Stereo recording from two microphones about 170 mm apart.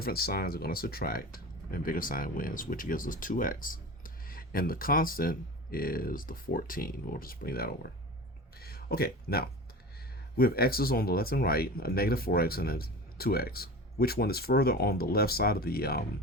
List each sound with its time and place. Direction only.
0.0 s speech: 65° left (ahead or behind)
8.5 s a sound: 65° left (ahead or behind)
10.3 s speech: 60° left (ahead or behind)